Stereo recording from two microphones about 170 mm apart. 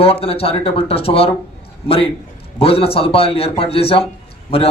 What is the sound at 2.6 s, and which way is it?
A man's voice, 35° left (ahead or behind).